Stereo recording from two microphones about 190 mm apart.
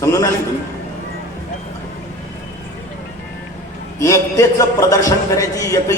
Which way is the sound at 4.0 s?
15° left (ahead or behind).